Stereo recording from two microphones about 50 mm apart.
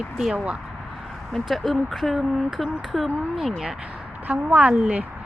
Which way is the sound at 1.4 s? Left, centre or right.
Centre.